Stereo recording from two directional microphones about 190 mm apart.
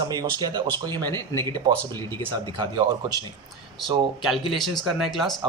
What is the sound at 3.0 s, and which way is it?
Speech, 20° right (ahead or behind).